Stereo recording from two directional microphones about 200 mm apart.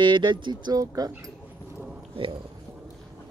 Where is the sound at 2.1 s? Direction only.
25° right (ahead or behind).